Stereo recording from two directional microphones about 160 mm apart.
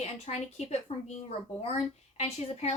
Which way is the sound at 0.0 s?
45° left (ahead or behind).